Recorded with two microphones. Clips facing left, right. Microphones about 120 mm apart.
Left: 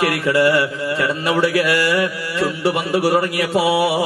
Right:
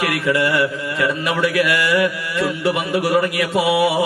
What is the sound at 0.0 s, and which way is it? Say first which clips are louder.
A man's voice: left 3 dB; 30° left (ahead or behind).